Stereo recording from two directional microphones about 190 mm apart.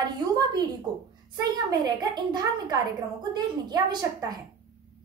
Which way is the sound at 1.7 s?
20° right (ahead or behind).